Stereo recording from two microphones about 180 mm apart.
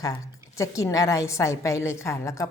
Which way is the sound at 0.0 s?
20° left (ahead or behind).